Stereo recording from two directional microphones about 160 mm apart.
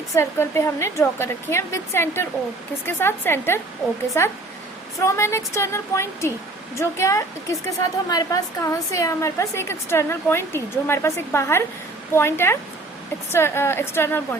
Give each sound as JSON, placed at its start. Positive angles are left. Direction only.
{"t": 0.1, "sound": "a woman's voice", "side_deg": 15}